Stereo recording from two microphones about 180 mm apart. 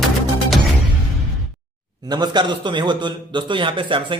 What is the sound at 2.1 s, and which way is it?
A man's voice, 25° right (ahead or behind).